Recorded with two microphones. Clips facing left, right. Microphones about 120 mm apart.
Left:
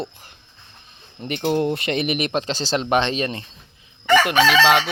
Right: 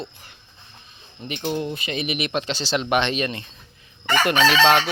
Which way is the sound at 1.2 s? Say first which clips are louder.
Left 5 dB; 55° left (ahead or behind).